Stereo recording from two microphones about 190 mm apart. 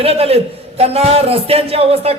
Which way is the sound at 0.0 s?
30° right (ahead or behind).